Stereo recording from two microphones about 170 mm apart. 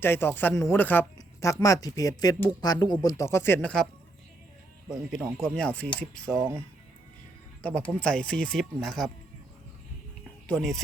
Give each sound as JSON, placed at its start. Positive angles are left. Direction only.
{"t": 0.0, "sound": "speech", "side_deg": 15}
{"t": 5.4, "sound": "speech", "side_deg": 5}
{"t": 6.3, "sound": "speech", "side_deg": -20}
{"t": 7.6, "sound": "speech", "side_deg": 5}
{"t": 10.4, "sound": "speech", "side_deg": 5}